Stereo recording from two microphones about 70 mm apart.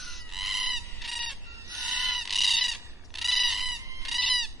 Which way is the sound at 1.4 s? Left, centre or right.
Right.